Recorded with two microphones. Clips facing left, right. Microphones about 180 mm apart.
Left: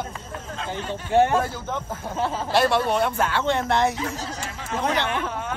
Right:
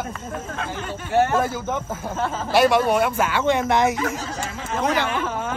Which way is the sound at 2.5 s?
10° right (ahead or behind).